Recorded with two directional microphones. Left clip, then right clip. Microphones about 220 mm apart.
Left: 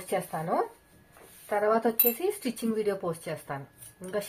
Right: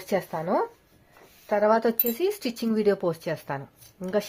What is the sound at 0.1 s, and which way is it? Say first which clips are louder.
A woman's voice: right 4 dB; 45° right (ahead or behind).